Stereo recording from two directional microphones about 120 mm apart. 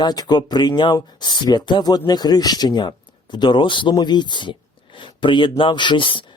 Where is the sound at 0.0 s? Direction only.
35° left (ahead or behind).